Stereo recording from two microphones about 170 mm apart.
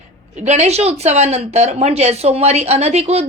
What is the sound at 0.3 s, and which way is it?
Speech, 40° right (ahead or behind).